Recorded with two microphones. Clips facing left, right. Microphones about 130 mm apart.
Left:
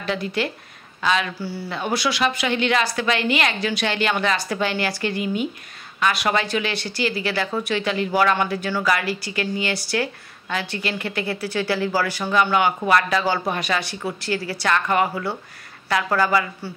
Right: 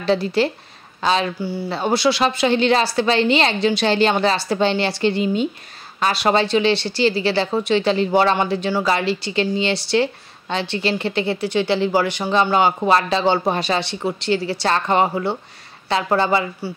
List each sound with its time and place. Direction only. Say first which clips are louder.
0.0 s speech: right 6 dB; 30° right (ahead or behind)
1.4 s speech: right 5 dB; 15° right (ahead or behind)
1.7 s a woman's voice: right 6 dB; 30° right (ahead or behind)